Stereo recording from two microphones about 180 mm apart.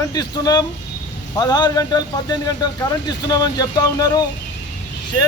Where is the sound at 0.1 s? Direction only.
20° left (ahead or behind).